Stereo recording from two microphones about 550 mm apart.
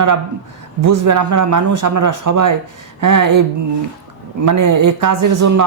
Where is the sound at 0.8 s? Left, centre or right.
Right.